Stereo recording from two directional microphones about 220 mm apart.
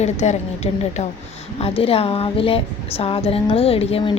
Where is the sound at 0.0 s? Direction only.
30° left (ahead or behind).